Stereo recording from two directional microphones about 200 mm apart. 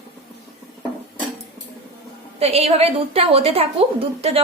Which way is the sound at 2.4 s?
30° right (ahead or behind).